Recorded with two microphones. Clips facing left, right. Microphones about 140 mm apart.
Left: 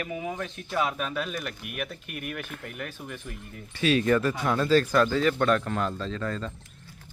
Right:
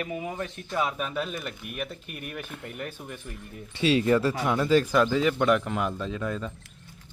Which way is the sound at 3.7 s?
25° right (ahead or behind).